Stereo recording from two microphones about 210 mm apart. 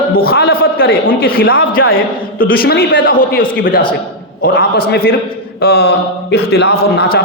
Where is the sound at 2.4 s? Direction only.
45° left (ahead or behind).